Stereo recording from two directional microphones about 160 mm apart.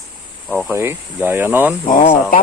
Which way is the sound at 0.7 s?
15° right (ahead or behind).